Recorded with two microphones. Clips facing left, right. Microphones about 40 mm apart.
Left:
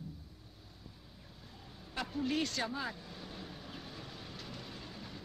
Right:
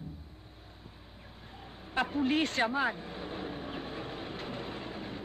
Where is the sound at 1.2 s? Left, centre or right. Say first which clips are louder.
Right 6 dB; right.